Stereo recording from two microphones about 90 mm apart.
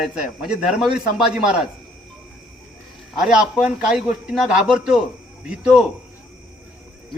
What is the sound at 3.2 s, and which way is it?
A man's voice, 5° right (ahead or behind).